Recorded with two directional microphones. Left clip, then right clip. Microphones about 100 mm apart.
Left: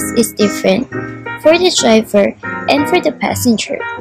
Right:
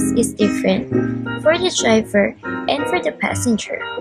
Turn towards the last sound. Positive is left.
turn(degrees=15)  # may be behind; listen again after turning